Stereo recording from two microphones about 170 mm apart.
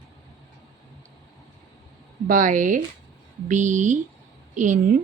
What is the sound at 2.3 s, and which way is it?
A woman's voice, 50° right (ahead or behind).